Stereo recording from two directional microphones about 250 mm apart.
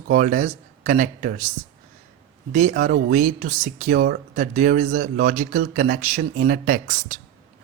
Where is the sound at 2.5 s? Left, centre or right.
Right.